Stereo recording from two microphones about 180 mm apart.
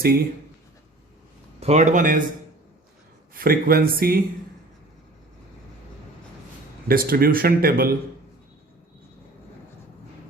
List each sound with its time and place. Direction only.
0.0 s speech: 55° right (ahead or behind)
1.6 s a man's voice: 40° right (ahead or behind)
3.3 s speech: 55° right (ahead or behind)
6.8 s speech: 55° right (ahead or behind)